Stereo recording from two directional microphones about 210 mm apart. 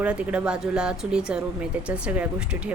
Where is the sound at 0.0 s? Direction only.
5° right (ahead or behind).